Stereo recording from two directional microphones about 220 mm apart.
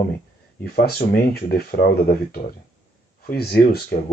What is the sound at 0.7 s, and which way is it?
Speech, 45° left (ahead or behind).